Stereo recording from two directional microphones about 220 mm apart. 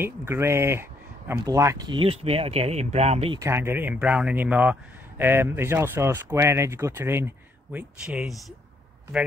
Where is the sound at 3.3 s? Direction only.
10° right (ahead or behind).